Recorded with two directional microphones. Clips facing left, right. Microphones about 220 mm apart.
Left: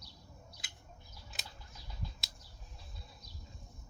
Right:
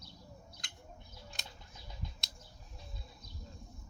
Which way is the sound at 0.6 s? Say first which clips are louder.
Right 1 dB; 5° left (ahead or behind).